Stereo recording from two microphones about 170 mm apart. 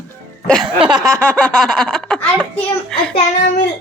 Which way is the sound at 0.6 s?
25° right (ahead or behind).